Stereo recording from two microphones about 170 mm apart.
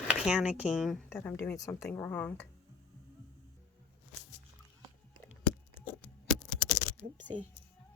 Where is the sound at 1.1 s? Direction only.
15° left (ahead or behind).